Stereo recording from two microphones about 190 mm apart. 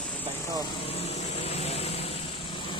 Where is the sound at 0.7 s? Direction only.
30° left (ahead or behind).